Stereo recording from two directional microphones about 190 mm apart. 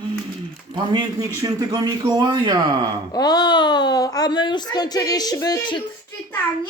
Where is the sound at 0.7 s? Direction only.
20° right (ahead or behind).